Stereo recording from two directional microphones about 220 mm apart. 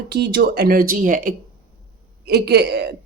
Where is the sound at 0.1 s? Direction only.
50° right (ahead or behind).